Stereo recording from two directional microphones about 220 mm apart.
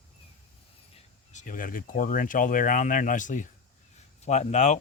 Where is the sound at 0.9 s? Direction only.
30° left (ahead or behind).